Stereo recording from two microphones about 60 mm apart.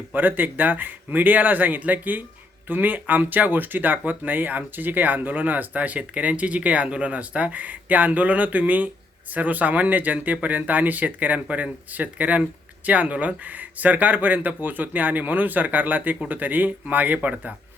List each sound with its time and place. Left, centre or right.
0.1 s speech: right